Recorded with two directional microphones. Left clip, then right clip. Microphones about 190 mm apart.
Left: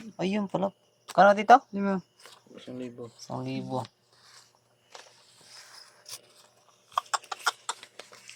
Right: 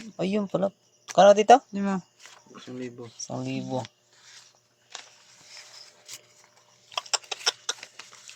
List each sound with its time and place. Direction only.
0.2 s speech: 30° right (ahead or behind)
3.3 s speech: 25° right (ahead or behind)
6.9 s a sound: 30° right (ahead or behind)